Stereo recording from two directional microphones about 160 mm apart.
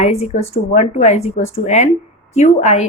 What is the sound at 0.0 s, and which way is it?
A woman's voice, 40° left (ahead or behind).